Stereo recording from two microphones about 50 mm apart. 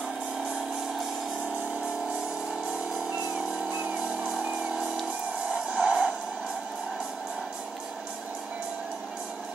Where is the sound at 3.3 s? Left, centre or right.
Right.